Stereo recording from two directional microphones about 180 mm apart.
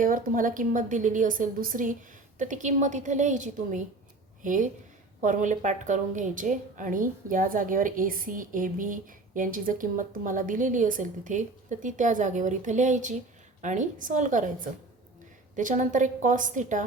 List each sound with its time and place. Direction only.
0.0 s a woman's voice: 50° right (ahead or behind)